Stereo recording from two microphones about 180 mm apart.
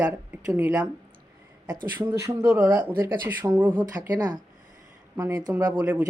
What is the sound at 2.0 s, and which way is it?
Speech, 20° right (ahead or behind).